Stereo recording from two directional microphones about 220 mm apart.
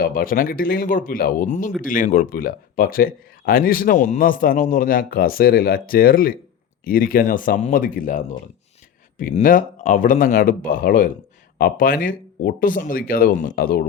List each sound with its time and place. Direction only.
0.0 s speech: 40° left (ahead or behind)